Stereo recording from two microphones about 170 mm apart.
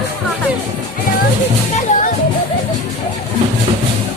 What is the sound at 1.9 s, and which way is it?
Music, 45° left (ahead or behind).